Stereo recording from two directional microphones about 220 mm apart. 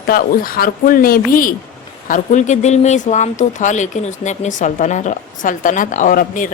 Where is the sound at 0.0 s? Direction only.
40° left (ahead or behind).